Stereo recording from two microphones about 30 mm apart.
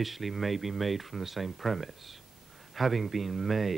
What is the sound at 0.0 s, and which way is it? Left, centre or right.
Speech, centre.